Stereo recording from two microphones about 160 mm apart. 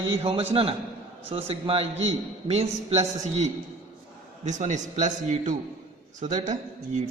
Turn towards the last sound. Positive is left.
turn(degrees=-50)  # may be behind; listen again after turning